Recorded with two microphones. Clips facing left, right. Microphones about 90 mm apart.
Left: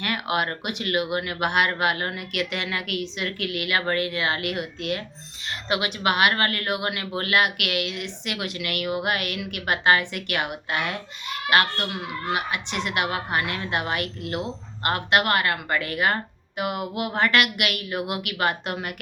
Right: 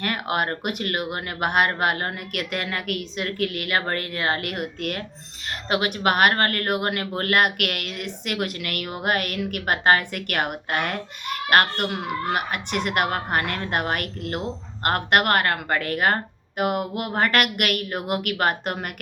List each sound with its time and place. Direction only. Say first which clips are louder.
0.0 s speech: right 1 dB; 40° right (ahead or behind)